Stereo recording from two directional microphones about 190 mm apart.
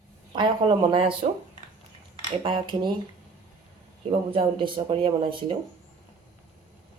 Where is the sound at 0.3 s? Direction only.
25° right (ahead or behind).